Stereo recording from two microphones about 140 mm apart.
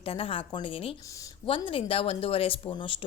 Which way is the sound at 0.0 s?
40° left (ahead or behind).